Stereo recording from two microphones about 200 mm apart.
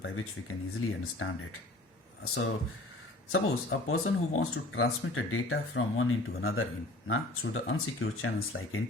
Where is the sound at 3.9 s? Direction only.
90° left.